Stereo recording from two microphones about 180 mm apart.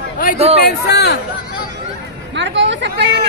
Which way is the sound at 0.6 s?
65° left (ahead or behind).